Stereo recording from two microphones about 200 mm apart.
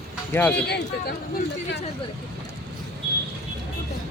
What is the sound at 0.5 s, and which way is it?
Speech, 55° left (ahead or behind).